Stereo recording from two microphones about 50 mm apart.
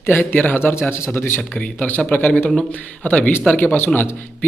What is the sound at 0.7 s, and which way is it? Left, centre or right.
Speech, left.